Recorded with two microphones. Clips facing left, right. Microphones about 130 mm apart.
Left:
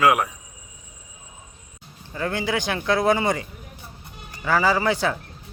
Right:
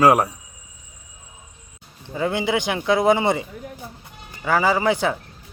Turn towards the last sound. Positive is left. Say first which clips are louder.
# right 2 dB
turn(degrees=-15)  # may be behind; listen again after turning